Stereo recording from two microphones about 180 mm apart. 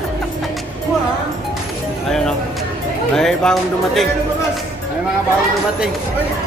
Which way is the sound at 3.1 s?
5° left (ahead or behind).